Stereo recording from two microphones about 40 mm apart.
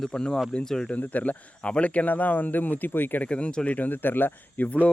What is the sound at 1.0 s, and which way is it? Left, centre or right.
Speech, left.